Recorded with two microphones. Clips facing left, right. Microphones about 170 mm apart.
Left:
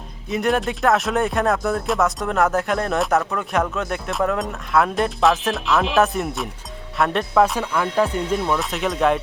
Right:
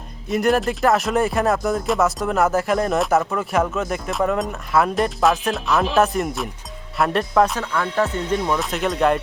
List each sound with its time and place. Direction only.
0.3 s speech: centre (ahead or behind)